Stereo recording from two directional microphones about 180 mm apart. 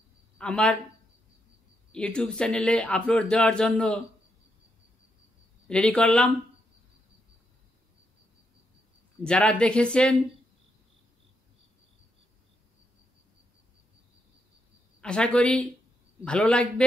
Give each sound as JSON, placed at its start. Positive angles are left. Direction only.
{"t": 0.4, "sound": "speech", "side_deg": 5}
{"t": 1.9, "sound": "speech", "side_deg": 5}
{"t": 5.7, "sound": "speech", "side_deg": 5}
{"t": 9.2, "sound": "speech", "side_deg": 5}
{"t": 15.0, "sound": "speech", "side_deg": 5}